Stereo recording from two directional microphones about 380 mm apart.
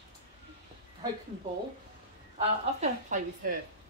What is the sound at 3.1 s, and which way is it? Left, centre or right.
Speech, centre.